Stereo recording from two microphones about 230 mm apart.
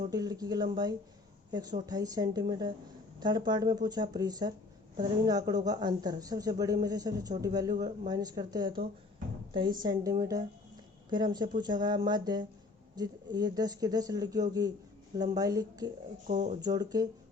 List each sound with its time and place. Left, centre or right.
0.1 s speech: centre
16.2 s speech: right
16.6 s speech: centre